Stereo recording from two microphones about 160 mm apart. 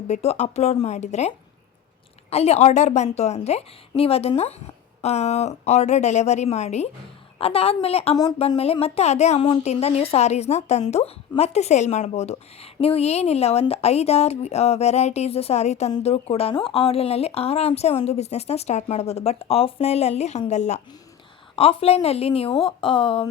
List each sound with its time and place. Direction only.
0.1 s a woman's voice: 45° left (ahead or behind)
2.3 s a woman's voice: 40° left (ahead or behind)
21.5 s speech: 35° left (ahead or behind)